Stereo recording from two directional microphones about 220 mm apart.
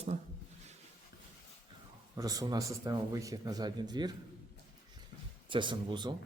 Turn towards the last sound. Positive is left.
turn(degrees=-20)  # may be behind; listen again after turning